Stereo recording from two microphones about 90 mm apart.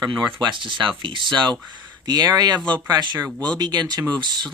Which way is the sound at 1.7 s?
50° right (ahead or behind).